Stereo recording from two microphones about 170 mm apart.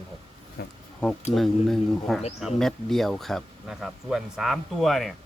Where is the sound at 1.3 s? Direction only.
Centre (ahead or behind).